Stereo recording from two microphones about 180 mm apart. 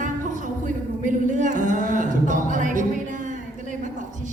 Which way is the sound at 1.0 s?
45° right (ahead or behind).